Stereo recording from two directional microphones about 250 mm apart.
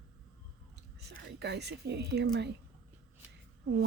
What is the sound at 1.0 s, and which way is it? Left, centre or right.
A woman's voice, right.